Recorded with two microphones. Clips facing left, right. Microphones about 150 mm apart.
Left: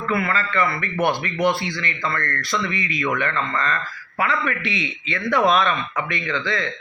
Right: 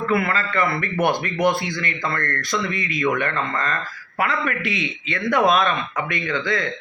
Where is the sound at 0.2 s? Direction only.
45° right (ahead or behind).